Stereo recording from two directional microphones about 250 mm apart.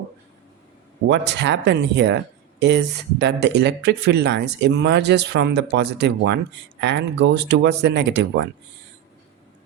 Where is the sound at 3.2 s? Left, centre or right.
Right.